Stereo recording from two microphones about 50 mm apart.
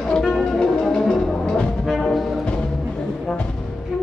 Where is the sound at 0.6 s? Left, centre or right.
Centre.